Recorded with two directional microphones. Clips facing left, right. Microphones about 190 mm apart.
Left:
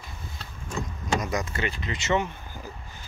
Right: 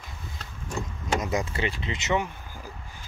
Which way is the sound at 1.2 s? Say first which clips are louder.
Right 1 dB; 25° right (ahead or behind).